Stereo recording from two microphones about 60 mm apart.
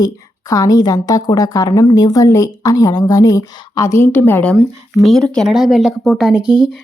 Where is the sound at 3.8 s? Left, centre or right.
Left.